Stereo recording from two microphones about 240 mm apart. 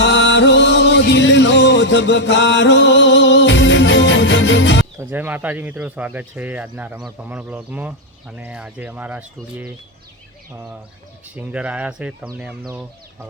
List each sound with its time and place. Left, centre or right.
0.0 s music: left
4.9 s speech: centre